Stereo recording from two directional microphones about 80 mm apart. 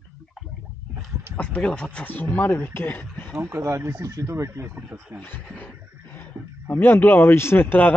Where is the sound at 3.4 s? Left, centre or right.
Right.